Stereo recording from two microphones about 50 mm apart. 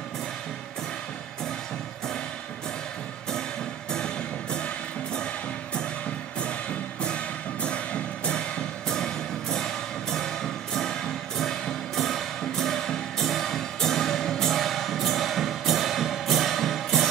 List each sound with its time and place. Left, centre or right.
3.9 s music: centre
7.6 s music: left; by 17.1 s centre